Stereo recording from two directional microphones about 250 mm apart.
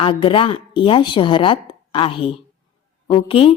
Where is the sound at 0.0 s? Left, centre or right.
Left.